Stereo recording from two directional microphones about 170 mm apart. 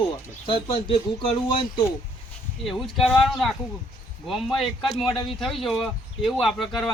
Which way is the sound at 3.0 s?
Centre (ahead or behind).